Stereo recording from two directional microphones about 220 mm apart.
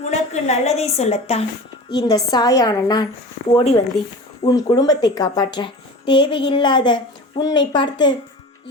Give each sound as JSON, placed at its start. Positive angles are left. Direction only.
{"t": 0.0, "sound": "a woman's voice", "side_deg": 30}
{"t": 1.9, "sound": "a woman's voice", "side_deg": 20}
{"t": 3.5, "sound": "a woman's voice", "side_deg": 30}
{"t": 4.4, "sound": "a woman's voice", "side_deg": 15}